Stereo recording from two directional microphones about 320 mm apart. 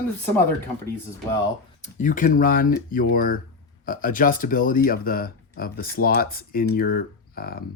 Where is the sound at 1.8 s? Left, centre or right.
Left.